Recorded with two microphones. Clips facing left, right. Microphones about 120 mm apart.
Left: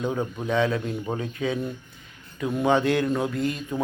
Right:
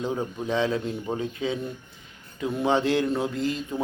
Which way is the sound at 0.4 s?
25° right (ahead or behind).